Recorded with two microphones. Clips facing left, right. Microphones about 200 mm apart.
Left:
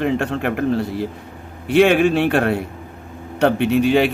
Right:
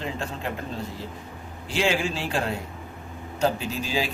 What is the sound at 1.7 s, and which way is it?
Speech, 60° left (ahead or behind).